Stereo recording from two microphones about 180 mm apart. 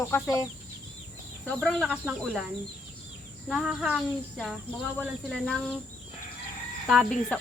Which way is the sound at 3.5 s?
Centre (ahead or behind).